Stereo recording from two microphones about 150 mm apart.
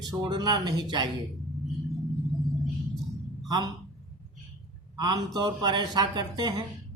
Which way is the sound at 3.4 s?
30° right (ahead or behind).